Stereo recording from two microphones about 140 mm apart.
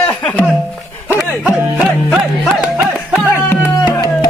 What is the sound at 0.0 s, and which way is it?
Music, 10° left (ahead or behind).